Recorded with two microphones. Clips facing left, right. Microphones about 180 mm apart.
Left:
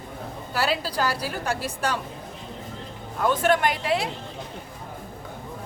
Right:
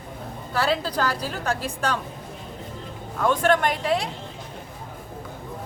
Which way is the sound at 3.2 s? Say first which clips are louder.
Right 1 dB; 5° left (ahead or behind).